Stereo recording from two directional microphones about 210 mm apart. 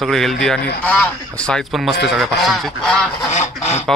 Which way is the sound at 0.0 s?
Centre (ahead or behind).